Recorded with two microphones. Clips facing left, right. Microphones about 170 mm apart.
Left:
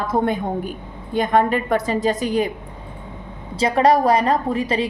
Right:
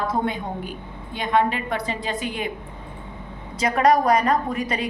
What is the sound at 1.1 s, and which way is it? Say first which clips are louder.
A woman's voice: left 4 dB; 45° left (ahead or behind).